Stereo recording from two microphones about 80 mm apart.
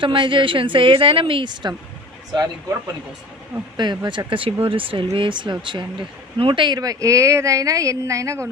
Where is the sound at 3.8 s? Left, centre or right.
Right.